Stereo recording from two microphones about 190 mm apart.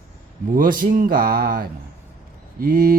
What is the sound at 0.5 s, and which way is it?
Mantra, 45° right (ahead or behind).